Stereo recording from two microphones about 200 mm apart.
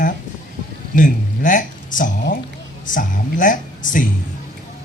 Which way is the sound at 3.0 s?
40° left (ahead or behind).